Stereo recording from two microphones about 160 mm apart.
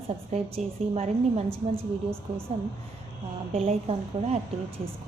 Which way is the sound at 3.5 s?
40° right (ahead or behind).